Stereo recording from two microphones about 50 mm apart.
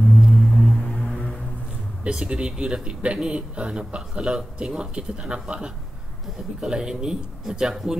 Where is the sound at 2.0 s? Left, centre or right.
Centre.